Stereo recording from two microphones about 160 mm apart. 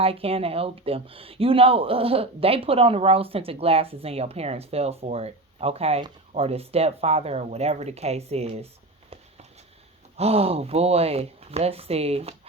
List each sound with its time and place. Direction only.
0.0 s speech: 35° right (ahead or behind)